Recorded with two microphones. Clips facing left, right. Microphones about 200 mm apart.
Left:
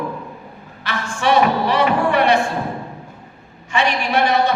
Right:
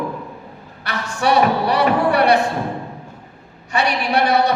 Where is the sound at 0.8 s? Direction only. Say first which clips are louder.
Even; 40° right (ahead or behind).